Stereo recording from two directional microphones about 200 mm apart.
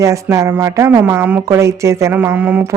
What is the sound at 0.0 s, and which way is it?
Speech, 15° right (ahead or behind).